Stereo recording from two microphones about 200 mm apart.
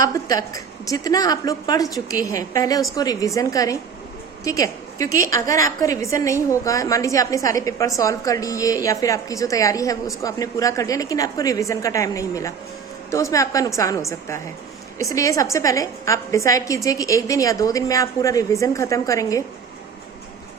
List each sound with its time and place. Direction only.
0.0 s a woman's voice: 15° left (ahead or behind)